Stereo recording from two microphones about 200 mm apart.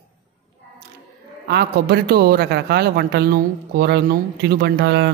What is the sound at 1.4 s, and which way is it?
A woman's voice, 55° right (ahead or behind).